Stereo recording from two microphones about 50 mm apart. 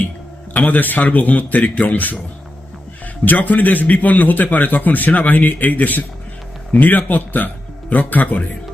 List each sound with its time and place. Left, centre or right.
0.5 s a man's voice: left
3.2 s a man's voice: left